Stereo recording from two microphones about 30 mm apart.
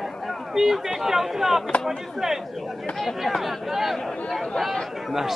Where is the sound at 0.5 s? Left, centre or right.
Centre.